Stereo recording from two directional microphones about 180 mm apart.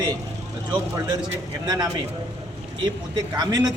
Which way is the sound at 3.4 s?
25° right (ahead or behind).